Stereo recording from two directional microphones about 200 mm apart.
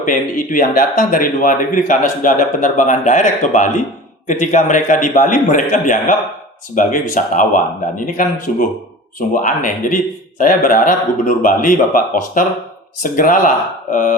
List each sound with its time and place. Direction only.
0.0 s speech: 40° left (ahead or behind)